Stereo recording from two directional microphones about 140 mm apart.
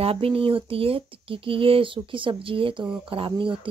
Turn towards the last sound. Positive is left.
turn(degrees=-40)  # may be behind; listen again after turning